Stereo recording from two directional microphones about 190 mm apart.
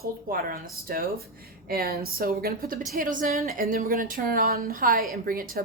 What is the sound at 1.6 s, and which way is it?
A woman's voice, 50° right (ahead or behind).